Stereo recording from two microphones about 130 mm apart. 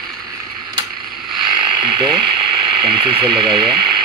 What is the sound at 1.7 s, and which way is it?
Speech, 35° right (ahead or behind).